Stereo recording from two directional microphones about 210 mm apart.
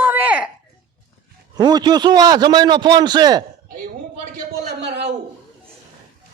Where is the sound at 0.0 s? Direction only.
10° right (ahead or behind).